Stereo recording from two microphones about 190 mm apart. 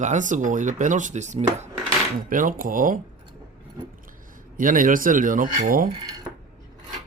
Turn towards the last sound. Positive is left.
turn(degrees=-45)  # may be behind; listen again after turning